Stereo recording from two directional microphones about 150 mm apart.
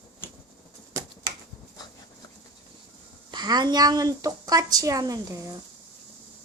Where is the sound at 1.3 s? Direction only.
35° right (ahead or behind).